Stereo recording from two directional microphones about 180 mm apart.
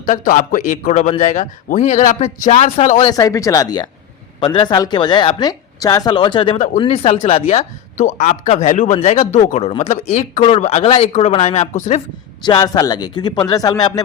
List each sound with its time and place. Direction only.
0.0 s a man's voice: 45° left (ahead or behind)
3.0 s speech: 20° left (ahead or behind); by 12.0 s 40° left (ahead or behind)
12.4 s speech: 25° left (ahead or behind)